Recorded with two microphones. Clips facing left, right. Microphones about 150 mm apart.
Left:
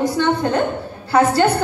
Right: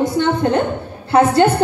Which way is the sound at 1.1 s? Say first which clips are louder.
Right 3 dB; 25° right (ahead or behind).